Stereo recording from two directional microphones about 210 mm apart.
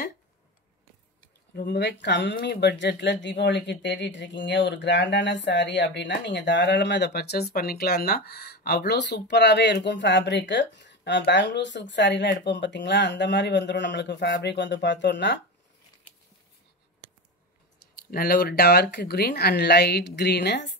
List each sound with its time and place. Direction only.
1.2 s speech: 50° left (ahead or behind)
18.1 s speech: 45° left (ahead or behind)